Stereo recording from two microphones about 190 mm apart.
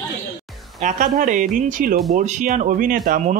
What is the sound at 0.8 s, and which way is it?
Speech, 45° right (ahead or behind).